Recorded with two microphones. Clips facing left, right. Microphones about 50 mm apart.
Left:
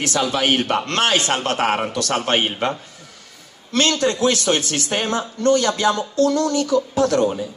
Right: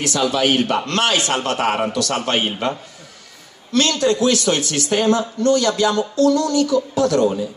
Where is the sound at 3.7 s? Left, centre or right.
Left.